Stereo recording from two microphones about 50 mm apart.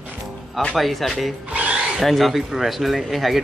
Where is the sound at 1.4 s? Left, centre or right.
Right.